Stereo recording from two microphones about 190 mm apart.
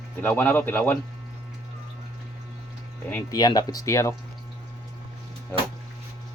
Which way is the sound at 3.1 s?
20° left (ahead or behind).